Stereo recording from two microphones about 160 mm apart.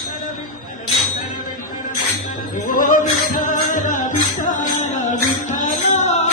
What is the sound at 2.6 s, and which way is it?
Music, 60° left (ahead or behind).